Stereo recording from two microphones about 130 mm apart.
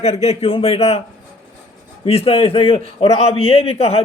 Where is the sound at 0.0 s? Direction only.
55° left (ahead or behind).